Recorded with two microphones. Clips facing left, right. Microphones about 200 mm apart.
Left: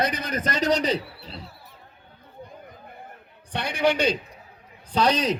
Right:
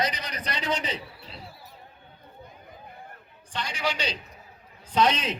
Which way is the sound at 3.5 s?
60° left (ahead or behind).